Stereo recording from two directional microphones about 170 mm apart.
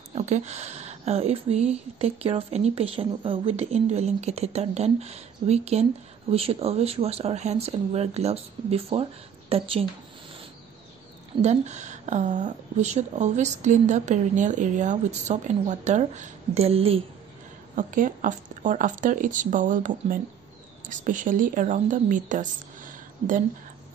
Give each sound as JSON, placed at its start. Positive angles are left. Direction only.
{"t": 0.1, "sound": "speech", "side_deg": -40}
{"t": 11.4, "sound": "a woman's voice", "side_deg": -45}
{"t": 17.7, "sound": "a woman's voice", "side_deg": -50}